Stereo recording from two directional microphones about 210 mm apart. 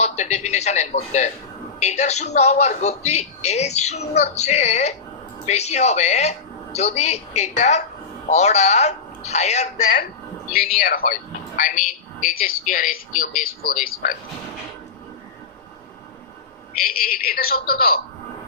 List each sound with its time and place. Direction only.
0.0 s a sound: 35° left (ahead or behind)
1.8 s a man's voice: 30° left (ahead or behind)
10.5 s a man's voice: 45° left (ahead or behind)
16.7 s a man's voice: 45° left (ahead or behind)